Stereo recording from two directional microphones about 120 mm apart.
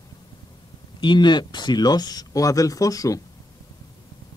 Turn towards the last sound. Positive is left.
turn(degrees=30)  # may be behind; listen again after turning